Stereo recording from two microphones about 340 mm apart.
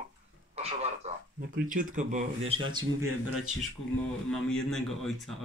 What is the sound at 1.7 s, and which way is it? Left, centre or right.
Speech, right.